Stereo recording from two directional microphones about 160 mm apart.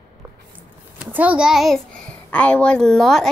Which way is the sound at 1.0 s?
10° right (ahead or behind).